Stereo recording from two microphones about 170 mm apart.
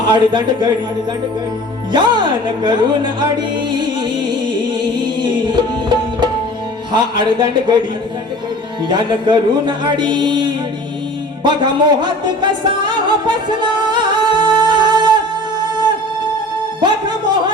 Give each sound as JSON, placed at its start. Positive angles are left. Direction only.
{"t": 0.0, "sound": "speech", "side_deg": -25}
{"t": 1.9, "sound": "music", "side_deg": -25}
{"t": 6.9, "sound": "speech", "side_deg": -25}
{"t": 11.4, "sound": "music", "side_deg": -25}
{"t": 16.8, "sound": "speech", "side_deg": -25}